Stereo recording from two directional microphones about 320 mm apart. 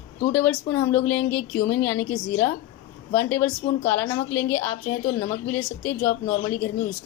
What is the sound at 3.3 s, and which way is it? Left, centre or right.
A woman's voice, centre.